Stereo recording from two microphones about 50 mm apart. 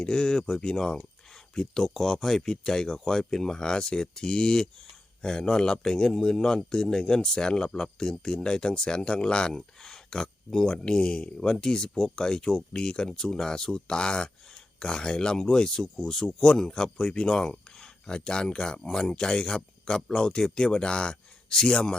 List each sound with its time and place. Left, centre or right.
0.0 s speech: centre